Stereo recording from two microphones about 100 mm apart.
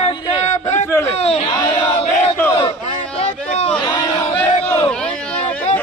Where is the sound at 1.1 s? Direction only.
90° left.